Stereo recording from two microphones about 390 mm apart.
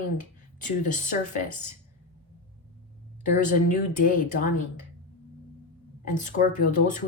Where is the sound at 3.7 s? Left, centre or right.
Centre.